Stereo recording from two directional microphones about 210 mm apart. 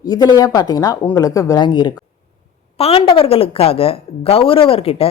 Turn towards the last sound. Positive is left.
turn(degrees=25)  # may be behind; listen again after turning